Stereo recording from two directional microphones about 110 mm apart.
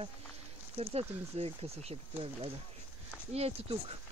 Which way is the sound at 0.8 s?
60° right (ahead or behind).